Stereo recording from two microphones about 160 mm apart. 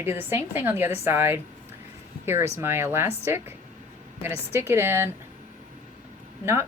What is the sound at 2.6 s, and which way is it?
A woman's voice, 15° right (ahead or behind).